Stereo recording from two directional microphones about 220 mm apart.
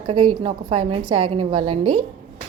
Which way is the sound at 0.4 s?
25° right (ahead or behind).